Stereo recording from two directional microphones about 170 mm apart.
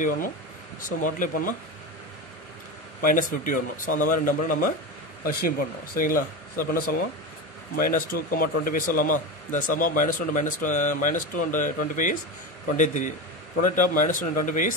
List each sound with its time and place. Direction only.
0.0 s speech: 50° left (ahead or behind)
3.0 s speech: 55° left (ahead or behind)